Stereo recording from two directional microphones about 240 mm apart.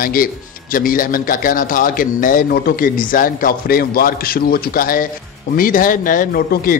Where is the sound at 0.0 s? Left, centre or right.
Left.